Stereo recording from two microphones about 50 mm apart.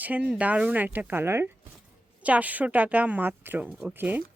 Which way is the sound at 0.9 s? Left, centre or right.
Right.